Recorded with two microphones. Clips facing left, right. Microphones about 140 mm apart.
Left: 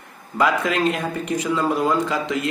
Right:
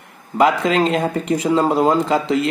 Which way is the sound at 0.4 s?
25° right (ahead or behind).